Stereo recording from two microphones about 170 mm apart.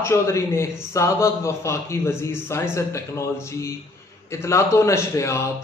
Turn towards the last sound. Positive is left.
turn(degrees=15)  # may be behind; listen again after turning